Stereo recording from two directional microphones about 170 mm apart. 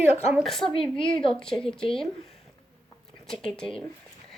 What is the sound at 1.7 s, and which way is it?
Speech, 30° left (ahead or behind).